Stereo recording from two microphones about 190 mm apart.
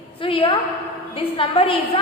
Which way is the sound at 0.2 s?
30° left (ahead or behind).